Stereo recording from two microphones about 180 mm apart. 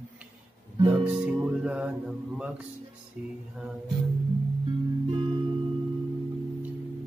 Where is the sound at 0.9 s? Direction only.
5° right (ahead or behind).